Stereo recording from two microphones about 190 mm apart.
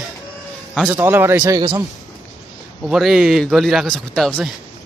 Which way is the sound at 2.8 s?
Centre (ahead or behind).